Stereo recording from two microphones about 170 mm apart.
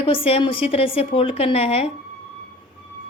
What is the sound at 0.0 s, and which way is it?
A woman's voice, 30° left (ahead or behind).